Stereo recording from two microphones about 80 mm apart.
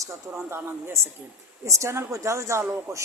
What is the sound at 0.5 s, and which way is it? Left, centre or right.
A woman's voice, right.